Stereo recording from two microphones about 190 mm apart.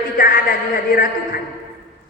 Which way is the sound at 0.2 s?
45° left (ahead or behind).